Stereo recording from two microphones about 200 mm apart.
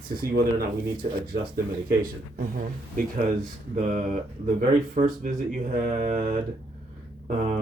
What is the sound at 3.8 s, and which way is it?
Speech, 40° right (ahead or behind).